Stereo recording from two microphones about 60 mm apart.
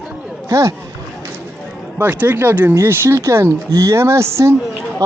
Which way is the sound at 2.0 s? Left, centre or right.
Right.